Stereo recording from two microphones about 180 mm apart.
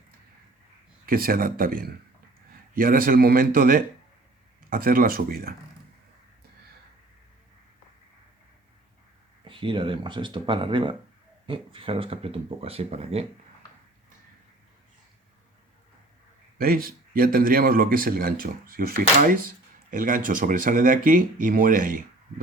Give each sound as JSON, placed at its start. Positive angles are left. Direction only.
{"t": 1.0, "sound": "a man's voice", "side_deg": -55}
{"t": 9.4, "sound": "speech", "side_deg": -30}
{"t": 16.6, "sound": "a man's voice", "side_deg": -55}